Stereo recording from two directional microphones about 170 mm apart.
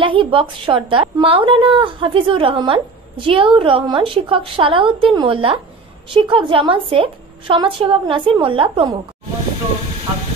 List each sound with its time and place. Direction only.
0.0 s a woman's voice: 30° right (ahead or behind)